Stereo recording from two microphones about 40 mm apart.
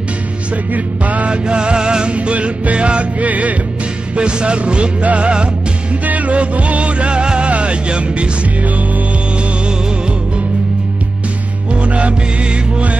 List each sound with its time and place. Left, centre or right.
0.7 s music: right
1.3 s music: right
2.1 s music: right
4.2 s music: right
11.7 s music: right